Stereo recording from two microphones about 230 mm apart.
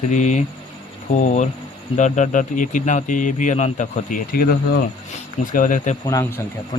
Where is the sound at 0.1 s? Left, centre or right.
Left.